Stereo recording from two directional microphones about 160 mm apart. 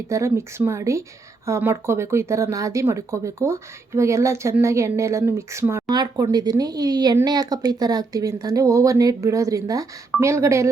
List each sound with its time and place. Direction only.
0.1 s speech: 15° right (ahead or behind)